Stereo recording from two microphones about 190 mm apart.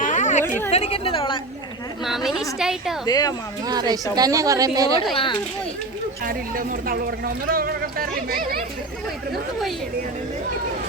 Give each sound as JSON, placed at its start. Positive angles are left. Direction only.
{"t": 0.0, "sound": "a sound", "side_deg": 40}
{"t": 0.7, "sound": "a woman's voice", "side_deg": 30}
{"t": 2.0, "sound": "speech", "side_deg": 0}
{"t": 3.1, "sound": "speech", "side_deg": 20}
{"t": 3.7, "sound": "speech", "side_deg": -20}
{"t": 5.1, "sound": "speech", "side_deg": 25}
{"t": 6.2, "sound": "speech", "side_deg": -50}
{"t": 9.3, "sound": "speech", "side_deg": 0}